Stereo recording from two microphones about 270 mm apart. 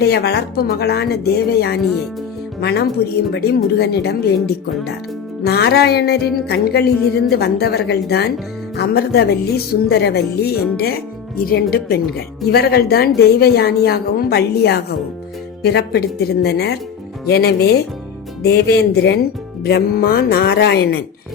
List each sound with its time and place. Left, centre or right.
0.0 s a woman's voice: left
5.5 s speech: left